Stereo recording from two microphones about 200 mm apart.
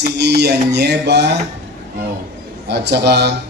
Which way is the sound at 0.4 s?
55° right (ahead or behind).